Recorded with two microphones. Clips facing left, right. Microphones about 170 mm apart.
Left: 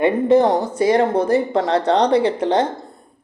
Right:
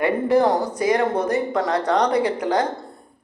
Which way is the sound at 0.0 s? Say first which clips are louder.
Left 4 dB; 20° left (ahead or behind).